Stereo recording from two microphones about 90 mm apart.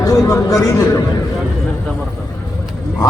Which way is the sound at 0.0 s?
40° left (ahead or behind).